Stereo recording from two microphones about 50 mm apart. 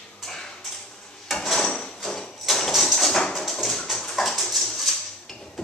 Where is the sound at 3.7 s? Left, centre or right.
Centre.